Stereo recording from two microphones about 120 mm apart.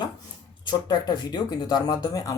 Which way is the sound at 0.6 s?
40° left (ahead or behind).